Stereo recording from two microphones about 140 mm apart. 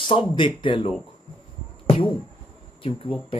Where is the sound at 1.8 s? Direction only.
40° left (ahead or behind).